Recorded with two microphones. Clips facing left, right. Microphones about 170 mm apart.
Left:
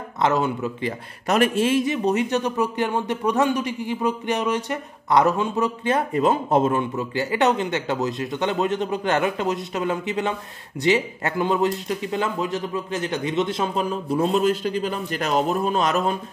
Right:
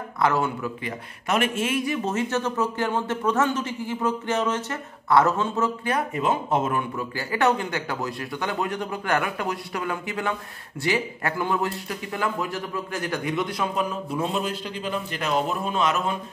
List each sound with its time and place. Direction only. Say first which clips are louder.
0.2 s a man's voice: left 2 dB; 20° left (ahead or behind)
0.8 s speech: left 4 dB; 40° left (ahead or behind); by 5.9 s 15° left (ahead or behind)
5.9 s a man's voice: left 5 dB; 35° left (ahead or behind)
14.0 s a man's voice: left 7 dB; 40° left (ahead or behind)